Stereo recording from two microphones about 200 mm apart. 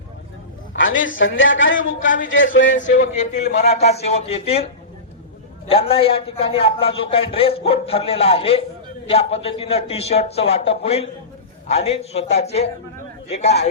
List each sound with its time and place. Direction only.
0.8 s a man's voice: 75° left (ahead or behind)
2.7 s a man's voice: 40° left (ahead or behind)
5.6 s a man's voice: 30° left (ahead or behind)